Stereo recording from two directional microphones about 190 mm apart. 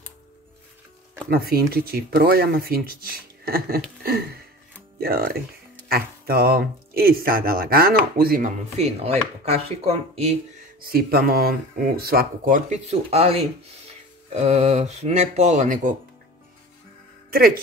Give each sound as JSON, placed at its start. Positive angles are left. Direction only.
{"t": 1.3, "sound": "speech", "side_deg": -55}
{"t": 4.0, "sound": "a sound", "side_deg": -55}
{"t": 5.0, "sound": "speech", "side_deg": -55}
{"t": 10.8, "sound": "speech", "side_deg": -55}